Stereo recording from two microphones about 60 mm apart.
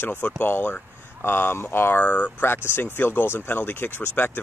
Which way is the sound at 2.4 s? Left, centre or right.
Left.